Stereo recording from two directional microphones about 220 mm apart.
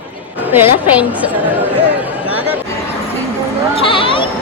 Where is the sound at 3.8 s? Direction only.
25° left (ahead or behind).